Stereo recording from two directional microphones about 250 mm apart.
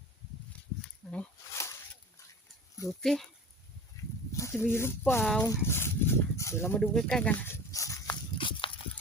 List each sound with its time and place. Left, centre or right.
1.1 s a sound: centre
3.0 s speech: centre
4.3 s speech: centre
5.4 s dog: centre